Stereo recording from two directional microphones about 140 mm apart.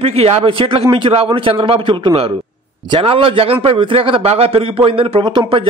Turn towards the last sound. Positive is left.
turn(degrees=-40)  # may be behind; listen again after turning